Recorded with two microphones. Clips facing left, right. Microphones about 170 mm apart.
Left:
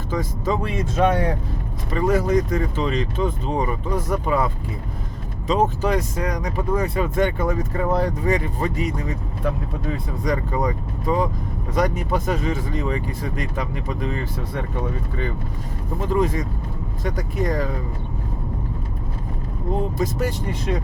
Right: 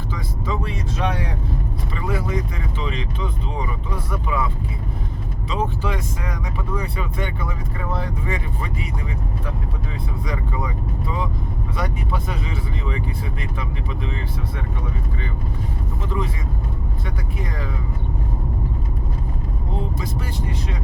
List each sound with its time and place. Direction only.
0.1 s speech: 45° left (ahead or behind)
10.2 s speech: 45° left (ahead or behind)
16.0 s speech: 45° left (ahead or behind)